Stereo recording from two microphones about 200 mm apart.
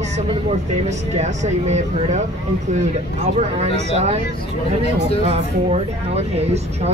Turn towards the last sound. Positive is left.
turn(degrees=-30)  # may be behind; listen again after turning